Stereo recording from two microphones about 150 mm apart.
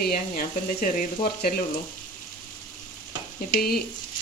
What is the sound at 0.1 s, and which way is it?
Speech, 65° left (ahead or behind).